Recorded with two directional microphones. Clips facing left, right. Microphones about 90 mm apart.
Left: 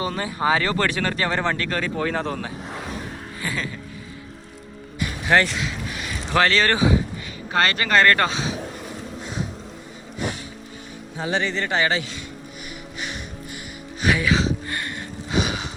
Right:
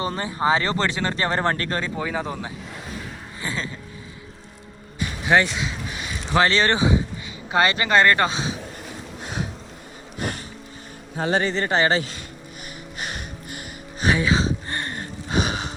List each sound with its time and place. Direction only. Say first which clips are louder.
0.0 s speech: even; 30° right (ahead or behind)
2.0 s speech: left 2 dB; 10° right (ahead or behind)
3.4 s speech: left 1 dB; 30° right (ahead or behind)
5.3 s speech: even; 20° right (ahead or behind)
9.2 s a sound: right 1 dB; 65° right (ahead or behind)
11.2 s speech: right 2 dB; 45° right (ahead or behind)
13.0 s music: even; 50° right (ahead or behind)
14.0 s music: even; 30° right (ahead or behind)